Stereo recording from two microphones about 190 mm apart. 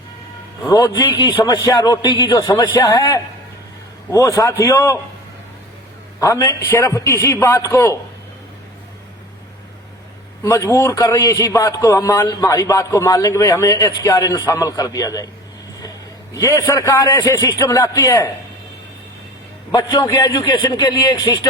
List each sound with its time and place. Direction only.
0.6 s a man's voice: 20° left (ahead or behind)
6.1 s a man's voice: 15° left (ahead or behind)
10.4 s a man's voice: 15° left (ahead or behind)
16.3 s a man's voice: 15° left (ahead or behind)
19.7 s a man's voice: 20° left (ahead or behind)